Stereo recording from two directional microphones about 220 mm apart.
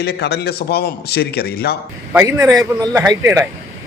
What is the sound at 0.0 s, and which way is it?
A man's voice, 50° left (ahead or behind).